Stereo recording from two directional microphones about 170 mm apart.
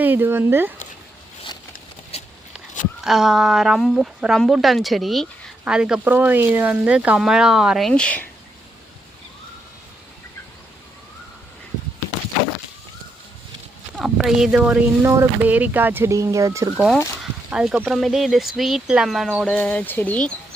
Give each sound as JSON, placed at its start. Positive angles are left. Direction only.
{"t": 0.0, "sound": "speech", "side_deg": -10}
{"t": 2.1, "sound": "a sound", "side_deg": 35}
{"t": 3.0, "sound": "speech", "side_deg": 0}
{"t": 13.9, "sound": "speech", "side_deg": -5}
{"t": 17.5, "sound": "speech", "side_deg": -5}